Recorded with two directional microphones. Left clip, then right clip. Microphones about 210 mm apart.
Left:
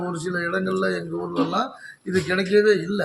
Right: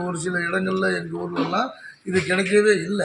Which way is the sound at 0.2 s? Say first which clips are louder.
Right 2 dB; 50° right (ahead or behind).